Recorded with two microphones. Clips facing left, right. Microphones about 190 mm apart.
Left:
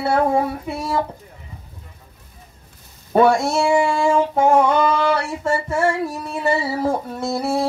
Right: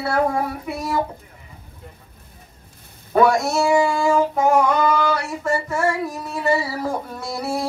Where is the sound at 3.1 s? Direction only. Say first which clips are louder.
Left 1 dB; 25° left (ahead or behind).